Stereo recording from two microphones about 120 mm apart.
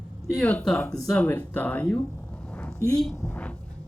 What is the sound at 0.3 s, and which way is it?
Speech, 5° left (ahead or behind).